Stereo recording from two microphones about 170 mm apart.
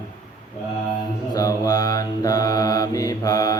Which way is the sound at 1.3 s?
20° left (ahead or behind).